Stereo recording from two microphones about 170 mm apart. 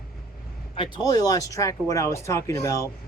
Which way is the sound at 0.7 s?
25° left (ahead or behind).